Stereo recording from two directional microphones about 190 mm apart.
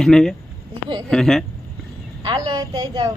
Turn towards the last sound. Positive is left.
turn(degrees=-20)  # may be behind; listen again after turning